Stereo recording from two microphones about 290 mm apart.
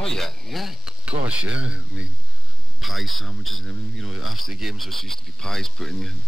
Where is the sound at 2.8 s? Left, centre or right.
Centre.